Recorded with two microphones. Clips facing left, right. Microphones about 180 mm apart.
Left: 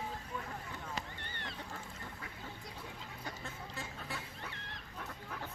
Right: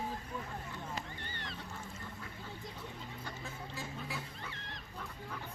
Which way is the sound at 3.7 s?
Centre (ahead or behind).